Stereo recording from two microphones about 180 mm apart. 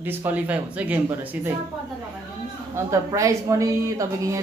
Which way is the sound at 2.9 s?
15° right (ahead or behind).